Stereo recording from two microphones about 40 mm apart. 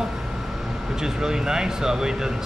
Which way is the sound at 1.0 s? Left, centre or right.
Centre.